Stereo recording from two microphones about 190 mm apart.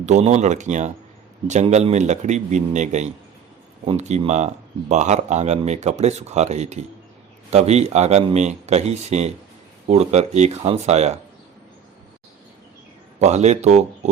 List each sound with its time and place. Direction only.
0.0 s speech: 35° right (ahead or behind)
13.1 s speech: 35° right (ahead or behind)